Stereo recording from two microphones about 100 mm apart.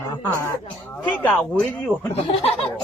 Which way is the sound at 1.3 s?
10° left (ahead or behind).